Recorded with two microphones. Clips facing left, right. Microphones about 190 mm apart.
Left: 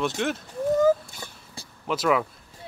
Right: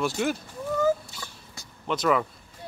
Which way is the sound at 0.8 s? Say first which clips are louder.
Left 4 dB; 50° left (ahead or behind).